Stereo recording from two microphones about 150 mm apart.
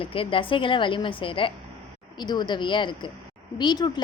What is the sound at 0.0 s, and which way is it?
A woman's voice, 35° left (ahead or behind).